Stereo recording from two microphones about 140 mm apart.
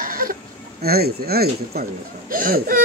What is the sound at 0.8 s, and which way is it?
Speech, 90° right.